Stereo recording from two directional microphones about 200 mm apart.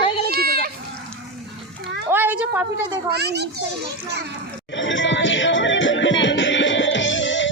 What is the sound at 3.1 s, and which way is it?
A child's voice, 55° right (ahead or behind).